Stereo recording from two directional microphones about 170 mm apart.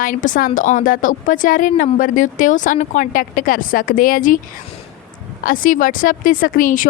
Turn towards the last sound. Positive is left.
turn(degrees=50)  # may be behind; listen again after turning